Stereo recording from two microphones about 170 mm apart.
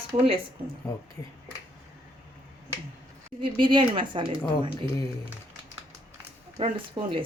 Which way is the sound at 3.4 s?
30° right (ahead or behind).